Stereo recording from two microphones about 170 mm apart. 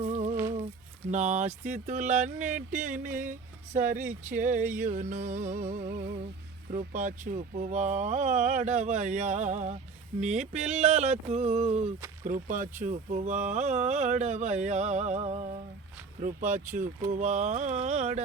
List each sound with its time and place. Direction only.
0.0 s a sound: 40° right (ahead or behind)
1.1 s speech: 45° right (ahead or behind)
4.6 s music: 10° right (ahead or behind)
4.9 s speech: 45° right (ahead or behind)
10.2 s a sound: 40° right (ahead or behind)
12.2 s speech: 50° right (ahead or behind)